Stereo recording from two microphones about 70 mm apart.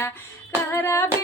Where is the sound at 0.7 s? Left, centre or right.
Left.